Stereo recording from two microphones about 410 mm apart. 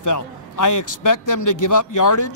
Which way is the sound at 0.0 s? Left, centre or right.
Left.